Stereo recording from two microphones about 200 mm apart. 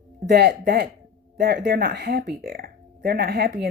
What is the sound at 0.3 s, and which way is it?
Speech, 55° right (ahead or behind).